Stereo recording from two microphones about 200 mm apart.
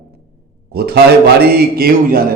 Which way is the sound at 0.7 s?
50° right (ahead or behind).